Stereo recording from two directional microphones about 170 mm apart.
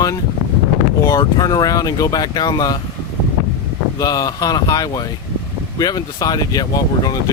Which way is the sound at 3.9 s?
20° left (ahead or behind).